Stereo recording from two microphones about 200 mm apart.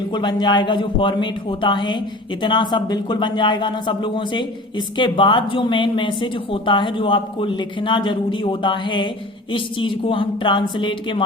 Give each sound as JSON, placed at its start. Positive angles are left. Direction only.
{"t": 0.1, "sound": "speech", "side_deg": 20}